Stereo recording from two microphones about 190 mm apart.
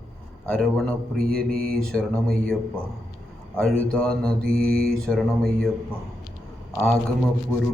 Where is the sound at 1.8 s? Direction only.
5° left (ahead or behind).